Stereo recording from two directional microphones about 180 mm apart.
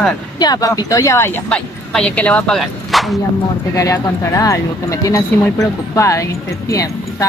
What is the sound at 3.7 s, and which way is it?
Speech, 20° left (ahead or behind).